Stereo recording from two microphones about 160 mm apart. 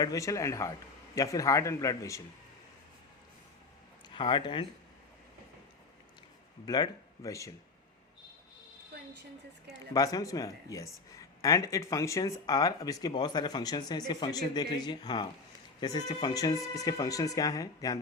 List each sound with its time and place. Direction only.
0.0 s speech: 20° left (ahead or behind)
4.1 s speech: 30° left (ahead or behind)
6.7 s speech: 25° left (ahead or behind)
9.9 s speech: 20° left (ahead or behind)